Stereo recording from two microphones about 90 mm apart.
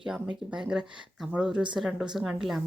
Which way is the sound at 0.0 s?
10° right (ahead or behind).